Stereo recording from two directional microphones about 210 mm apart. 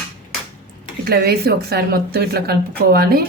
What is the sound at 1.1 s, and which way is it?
Speech, 45° right (ahead or behind).